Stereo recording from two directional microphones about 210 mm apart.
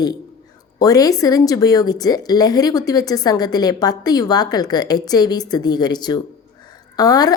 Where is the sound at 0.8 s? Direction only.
15° left (ahead or behind).